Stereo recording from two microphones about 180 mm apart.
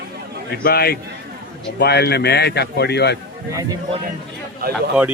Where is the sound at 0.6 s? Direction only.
60° left (ahead or behind).